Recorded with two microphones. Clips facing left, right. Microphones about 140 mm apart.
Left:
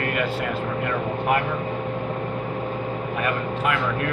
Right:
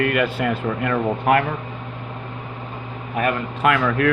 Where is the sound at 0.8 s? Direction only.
80° right.